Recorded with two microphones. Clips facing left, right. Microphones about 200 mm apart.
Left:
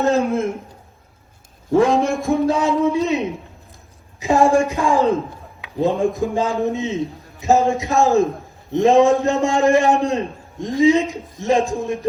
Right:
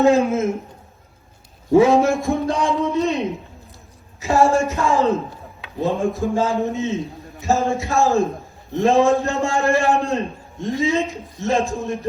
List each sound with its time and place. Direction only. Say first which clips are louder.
0.3 s a man's voice: even; 5° right (ahead or behind)
1.7 s a man's voice: right 2 dB; 5° right (ahead or behind)
4.2 s a man's voice: left 2 dB; 15° left (ahead or behind)